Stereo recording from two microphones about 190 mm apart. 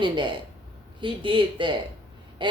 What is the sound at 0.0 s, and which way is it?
A woman's voice, 25° right (ahead or behind).